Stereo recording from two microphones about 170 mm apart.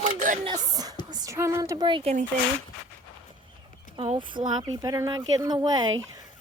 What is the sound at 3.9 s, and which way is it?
Speech, 30° right (ahead or behind).